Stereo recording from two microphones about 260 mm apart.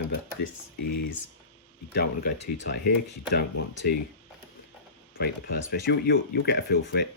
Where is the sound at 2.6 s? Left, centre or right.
Left.